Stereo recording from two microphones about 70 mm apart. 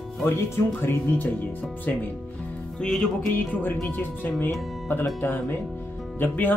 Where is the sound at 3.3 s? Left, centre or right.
Left.